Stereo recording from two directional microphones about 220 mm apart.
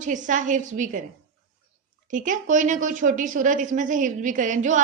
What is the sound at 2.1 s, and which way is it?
A woman's voice, 35° right (ahead or behind).